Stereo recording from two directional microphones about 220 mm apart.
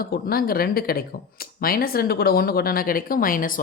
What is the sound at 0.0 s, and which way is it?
Speech, 45° left (ahead or behind).